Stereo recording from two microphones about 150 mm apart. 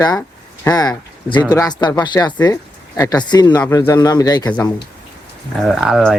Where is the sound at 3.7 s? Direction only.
15° left (ahead or behind).